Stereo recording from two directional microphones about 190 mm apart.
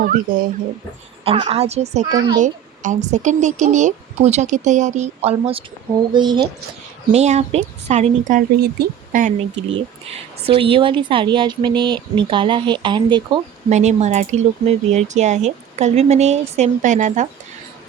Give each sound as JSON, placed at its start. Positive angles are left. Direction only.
{"t": 0.0, "sound": "speech", "side_deg": -45}
{"t": 1.2, "sound": "speech", "side_deg": -30}
{"t": 2.0, "sound": "speech", "side_deg": -20}
{"t": 2.4, "sound": "speech", "side_deg": -40}
{"t": 7.1, "sound": "speech", "side_deg": -35}
{"t": 10.6, "sound": "speech", "side_deg": -25}
{"t": 13.7, "sound": "speech", "side_deg": -35}